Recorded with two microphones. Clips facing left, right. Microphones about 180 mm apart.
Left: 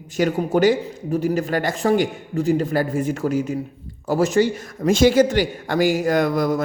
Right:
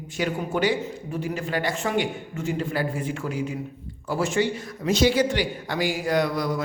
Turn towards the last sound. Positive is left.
turn(degrees=45)  # may be behind; listen again after turning